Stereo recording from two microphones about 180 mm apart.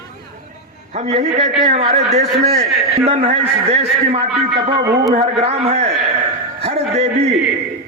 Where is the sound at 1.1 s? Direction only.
40° right (ahead or behind).